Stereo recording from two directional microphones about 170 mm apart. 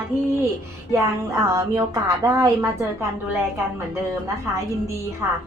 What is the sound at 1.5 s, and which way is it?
A woman's voice, 20° right (ahead or behind).